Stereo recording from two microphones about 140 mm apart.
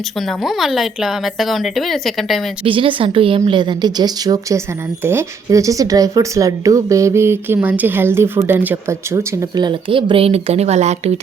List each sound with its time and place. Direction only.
0.3 s a woman's voice: centre (ahead or behind)
2.6 s a woman's voice: 40° right (ahead or behind)